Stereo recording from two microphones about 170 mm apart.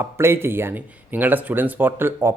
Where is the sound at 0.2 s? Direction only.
15° right (ahead or behind).